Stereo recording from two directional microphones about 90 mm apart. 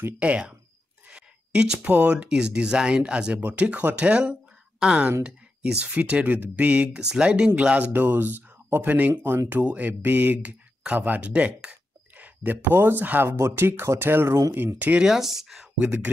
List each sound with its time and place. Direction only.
0.2 s speech: 15° right (ahead or behind)
15.0 s speech: 5° right (ahead or behind)
15.8 s speech: 20° right (ahead or behind)